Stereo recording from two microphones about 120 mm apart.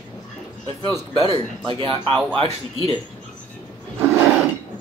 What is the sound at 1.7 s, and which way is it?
Speech, 45° right (ahead or behind).